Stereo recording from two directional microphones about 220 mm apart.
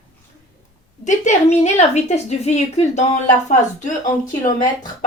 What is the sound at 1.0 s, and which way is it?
A woman's voice, 35° left (ahead or behind).